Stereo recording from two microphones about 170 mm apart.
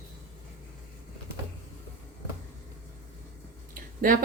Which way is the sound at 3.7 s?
55° right (ahead or behind).